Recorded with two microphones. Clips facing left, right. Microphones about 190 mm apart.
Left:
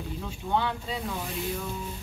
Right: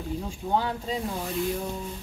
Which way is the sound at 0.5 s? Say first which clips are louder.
Right 1 dB; 40° right (ahead or behind).